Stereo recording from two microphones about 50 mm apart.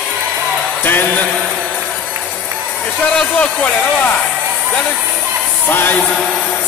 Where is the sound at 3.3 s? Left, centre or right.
Left.